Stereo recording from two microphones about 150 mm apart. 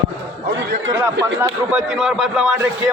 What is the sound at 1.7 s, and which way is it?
Speech, 5° right (ahead or behind).